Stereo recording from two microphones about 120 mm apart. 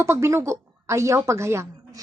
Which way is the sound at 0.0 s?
25° right (ahead or behind).